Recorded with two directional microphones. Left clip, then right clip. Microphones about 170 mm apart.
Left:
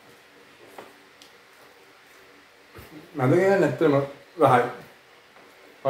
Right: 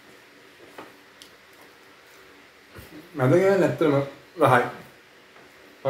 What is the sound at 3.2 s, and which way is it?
Speech, 10° right (ahead or behind).